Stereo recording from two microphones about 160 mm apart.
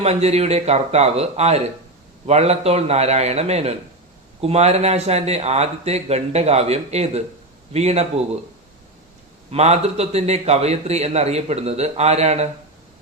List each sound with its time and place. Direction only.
0.0 s a man's voice: 40° right (ahead or behind)
9.5 s a man's voice: 40° right (ahead or behind)